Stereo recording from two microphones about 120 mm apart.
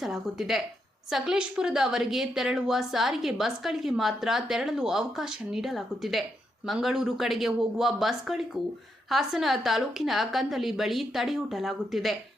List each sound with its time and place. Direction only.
0.0 s a woman's voice: 5° right (ahead or behind)